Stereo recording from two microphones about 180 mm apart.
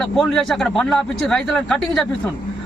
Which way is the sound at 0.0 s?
5° left (ahead or behind).